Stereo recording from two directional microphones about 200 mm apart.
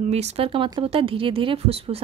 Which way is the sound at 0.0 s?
35° right (ahead or behind).